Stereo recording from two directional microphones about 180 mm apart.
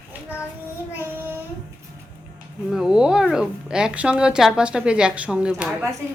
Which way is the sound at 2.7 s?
5° right (ahead or behind).